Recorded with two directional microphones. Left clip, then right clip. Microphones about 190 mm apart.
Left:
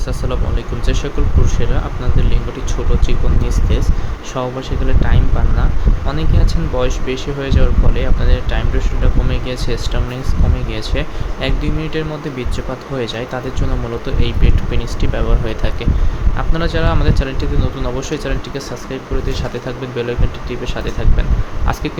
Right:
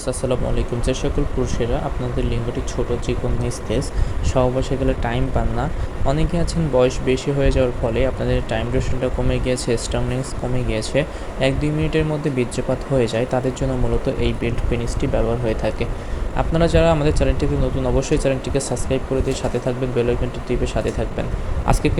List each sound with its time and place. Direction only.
0.2 s speech: 10° right (ahead or behind)
4.4 s speech: 15° right (ahead or behind)